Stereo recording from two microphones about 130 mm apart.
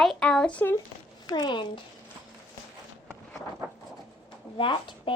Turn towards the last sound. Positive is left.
turn(degrees=40)  # may be behind; listen again after turning